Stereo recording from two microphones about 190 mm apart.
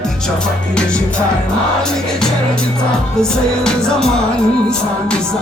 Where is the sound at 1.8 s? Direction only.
5° left (ahead or behind).